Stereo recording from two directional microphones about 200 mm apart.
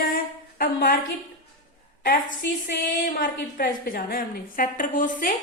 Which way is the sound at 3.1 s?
45° left (ahead or behind).